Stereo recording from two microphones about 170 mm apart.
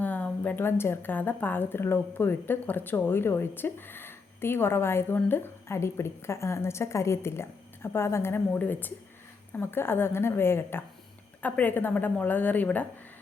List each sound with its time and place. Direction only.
0.0 s a woman's voice: 10° left (ahead or behind)